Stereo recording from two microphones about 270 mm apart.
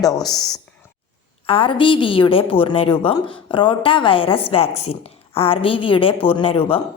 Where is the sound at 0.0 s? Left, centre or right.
Centre.